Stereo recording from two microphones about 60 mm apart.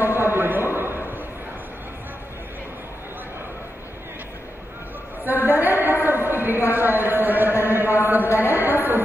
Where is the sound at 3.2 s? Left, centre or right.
Right.